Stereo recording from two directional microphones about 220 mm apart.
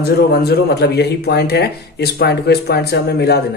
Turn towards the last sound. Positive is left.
turn(degrees=45)  # may be behind; listen again after turning